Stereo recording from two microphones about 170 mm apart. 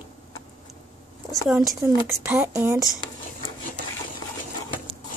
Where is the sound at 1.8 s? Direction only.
15° right (ahead or behind).